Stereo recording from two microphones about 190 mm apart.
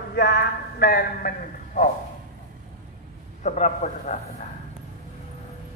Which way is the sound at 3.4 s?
40° left (ahead or behind).